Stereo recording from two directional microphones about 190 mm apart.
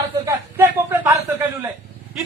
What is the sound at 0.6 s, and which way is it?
Speech, 10° right (ahead or behind).